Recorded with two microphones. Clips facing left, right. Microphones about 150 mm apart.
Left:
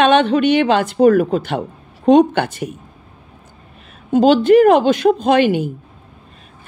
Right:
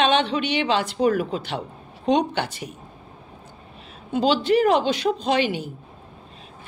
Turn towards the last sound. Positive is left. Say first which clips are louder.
# left 8 dB
turn(degrees=50)  # may be behind; listen again after turning